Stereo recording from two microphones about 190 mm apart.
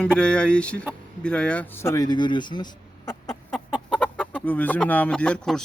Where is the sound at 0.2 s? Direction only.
5° left (ahead or behind); by 2.7 s 25° left (ahead or behind).